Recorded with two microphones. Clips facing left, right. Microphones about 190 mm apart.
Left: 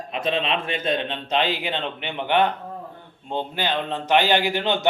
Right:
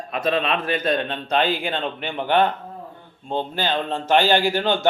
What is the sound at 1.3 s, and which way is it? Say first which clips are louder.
Speech: right 2 dB; 50° right (ahead or behind).